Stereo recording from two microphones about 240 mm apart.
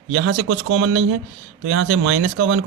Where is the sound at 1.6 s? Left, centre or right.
Right.